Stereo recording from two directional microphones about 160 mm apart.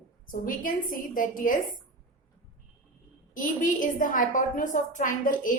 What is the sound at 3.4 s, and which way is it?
A woman's voice, 55° left (ahead or behind).